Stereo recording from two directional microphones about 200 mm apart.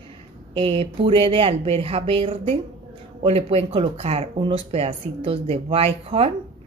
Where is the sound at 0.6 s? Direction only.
25° right (ahead or behind).